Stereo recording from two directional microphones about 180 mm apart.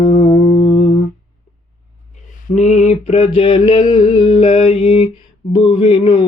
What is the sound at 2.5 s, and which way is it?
Mantra, 40° left (ahead or behind).